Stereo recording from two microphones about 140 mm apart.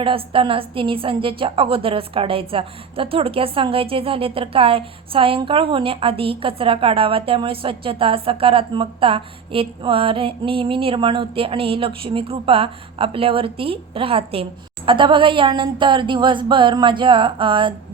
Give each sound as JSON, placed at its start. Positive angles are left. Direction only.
{"t": 0.0, "sound": "a woman's voice", "side_deg": -40}